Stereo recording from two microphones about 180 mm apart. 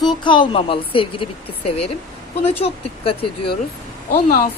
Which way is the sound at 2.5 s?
30° left (ahead or behind).